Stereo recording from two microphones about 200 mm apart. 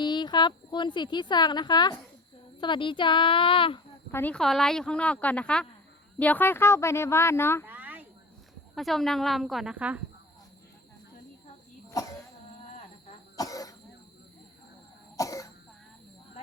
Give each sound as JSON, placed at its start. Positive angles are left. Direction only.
{"t": 0.0, "sound": "speech", "side_deg": 20}
{"t": 4.1, "sound": "speech", "side_deg": 10}
{"t": 7.6, "sound": "a sound", "side_deg": -10}
{"t": 8.7, "sound": "speech", "side_deg": 0}
{"t": 11.9, "sound": "speech", "side_deg": 15}
{"t": 13.3, "sound": "cough", "side_deg": 15}
{"t": 15.1, "sound": "throat clearing", "side_deg": 15}